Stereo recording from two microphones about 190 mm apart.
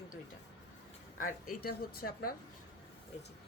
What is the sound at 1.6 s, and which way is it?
Speech, 55° left (ahead or behind).